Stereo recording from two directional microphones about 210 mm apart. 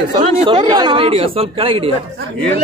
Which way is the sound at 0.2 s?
20° right (ahead or behind).